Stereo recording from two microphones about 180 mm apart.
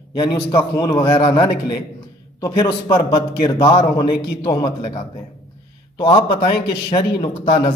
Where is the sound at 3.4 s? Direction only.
20° left (ahead or behind).